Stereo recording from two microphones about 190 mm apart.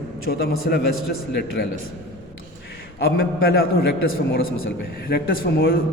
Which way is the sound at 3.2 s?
50° left (ahead or behind).